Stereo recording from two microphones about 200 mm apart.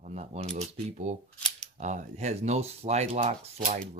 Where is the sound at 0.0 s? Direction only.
35° right (ahead or behind).